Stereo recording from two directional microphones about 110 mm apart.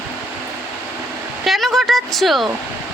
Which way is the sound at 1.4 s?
Centre (ahead or behind).